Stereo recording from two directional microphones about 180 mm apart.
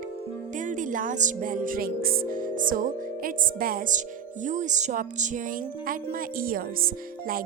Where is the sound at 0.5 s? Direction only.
45° right (ahead or behind).